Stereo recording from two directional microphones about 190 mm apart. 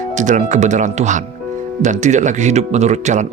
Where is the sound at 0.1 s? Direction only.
40° right (ahead or behind).